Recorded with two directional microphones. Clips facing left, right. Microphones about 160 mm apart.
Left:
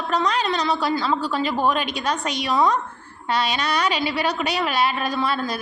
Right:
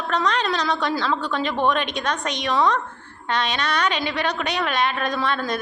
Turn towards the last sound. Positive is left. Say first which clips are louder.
# even
turn(degrees=5)  # may be behind; listen again after turning